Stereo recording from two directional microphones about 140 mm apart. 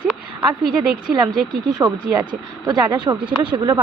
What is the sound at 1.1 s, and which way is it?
Speech, 30° right (ahead or behind).